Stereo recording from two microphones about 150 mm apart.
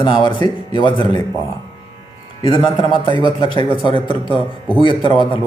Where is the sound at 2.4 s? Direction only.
35° left (ahead or behind).